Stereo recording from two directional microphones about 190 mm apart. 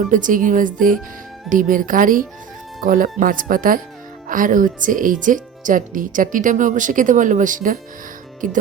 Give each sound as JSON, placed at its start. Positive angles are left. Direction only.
{"t": 0.0, "sound": "speech", "side_deg": -45}